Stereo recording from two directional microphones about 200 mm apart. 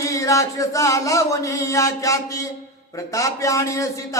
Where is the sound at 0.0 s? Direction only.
15° left (ahead or behind).